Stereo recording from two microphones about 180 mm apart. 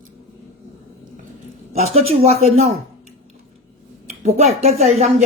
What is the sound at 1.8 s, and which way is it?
Speech, 35° right (ahead or behind).